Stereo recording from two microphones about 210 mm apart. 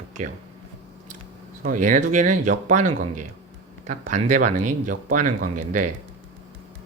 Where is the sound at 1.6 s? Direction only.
40° right (ahead or behind).